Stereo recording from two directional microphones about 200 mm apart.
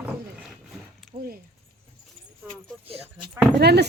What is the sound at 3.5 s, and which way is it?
Speech, 55° right (ahead or behind).